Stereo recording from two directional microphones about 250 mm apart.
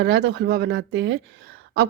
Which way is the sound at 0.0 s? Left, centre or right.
Right.